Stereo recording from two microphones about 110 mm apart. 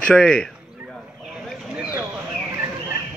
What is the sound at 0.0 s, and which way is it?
Speech, 5° left (ahead or behind).